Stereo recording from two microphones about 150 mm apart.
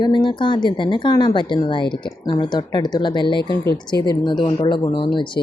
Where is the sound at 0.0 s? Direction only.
30° left (ahead or behind).